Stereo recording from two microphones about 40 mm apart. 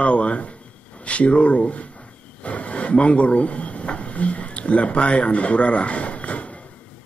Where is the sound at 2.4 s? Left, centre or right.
Left.